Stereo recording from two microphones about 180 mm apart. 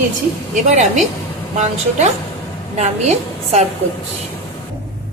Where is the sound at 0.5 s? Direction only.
40° right (ahead or behind).